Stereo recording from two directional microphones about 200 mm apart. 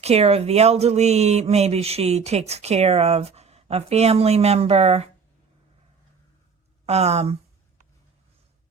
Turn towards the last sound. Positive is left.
turn(degrees=-30)  # may be behind; listen again after turning